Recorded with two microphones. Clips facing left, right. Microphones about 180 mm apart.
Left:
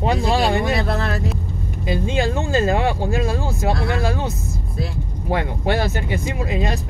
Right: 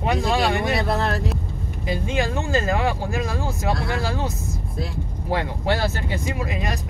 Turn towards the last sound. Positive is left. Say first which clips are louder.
# left 3 dB
turn(degrees=25)  # may be behind; listen again after turning